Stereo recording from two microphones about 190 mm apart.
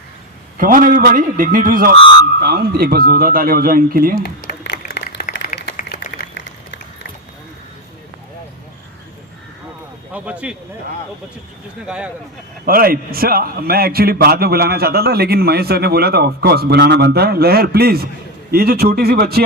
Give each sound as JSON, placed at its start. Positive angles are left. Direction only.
{"t": 0.5, "sound": "speech", "side_deg": -45}
{"t": 4.2, "sound": "a sound", "side_deg": 65}
{"t": 5.0, "sound": "a sound", "side_deg": 50}
{"t": 10.1, "sound": "speech", "side_deg": -5}
{"t": 11.9, "sound": "speech", "side_deg": -5}
{"t": 12.6, "sound": "a man's voice", "side_deg": -50}